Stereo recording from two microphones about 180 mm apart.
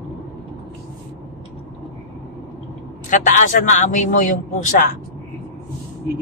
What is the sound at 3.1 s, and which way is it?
A man's voice, 45° left (ahead or behind).